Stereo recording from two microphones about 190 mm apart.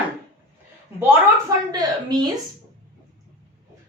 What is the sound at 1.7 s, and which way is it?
Speech, 20° right (ahead or behind).